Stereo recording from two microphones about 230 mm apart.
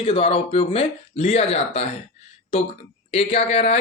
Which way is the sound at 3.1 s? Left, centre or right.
Left.